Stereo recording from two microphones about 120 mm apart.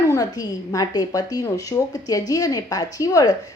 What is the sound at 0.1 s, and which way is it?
A woman's voice, 30° left (ahead or behind).